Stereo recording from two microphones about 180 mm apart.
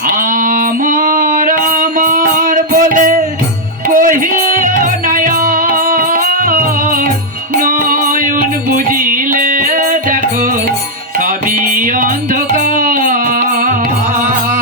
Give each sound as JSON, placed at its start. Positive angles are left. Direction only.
{"t": 0.4, "sound": "music", "side_deg": -50}
{"t": 11.9, "sound": "music", "side_deg": -50}